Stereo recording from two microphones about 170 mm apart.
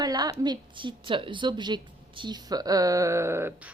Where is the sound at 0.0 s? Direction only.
20° right (ahead or behind).